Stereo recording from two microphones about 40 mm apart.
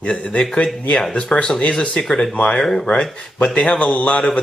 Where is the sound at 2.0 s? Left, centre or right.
Centre.